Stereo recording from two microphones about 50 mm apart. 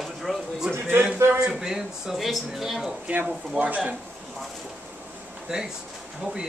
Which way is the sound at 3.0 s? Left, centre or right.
Right.